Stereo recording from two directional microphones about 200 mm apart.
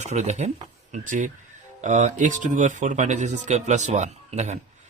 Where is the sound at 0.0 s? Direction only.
35° right (ahead or behind).